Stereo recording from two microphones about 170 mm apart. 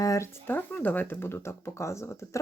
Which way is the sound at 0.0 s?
20° left (ahead or behind).